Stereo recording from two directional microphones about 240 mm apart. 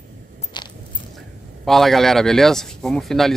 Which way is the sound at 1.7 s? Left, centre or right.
Centre.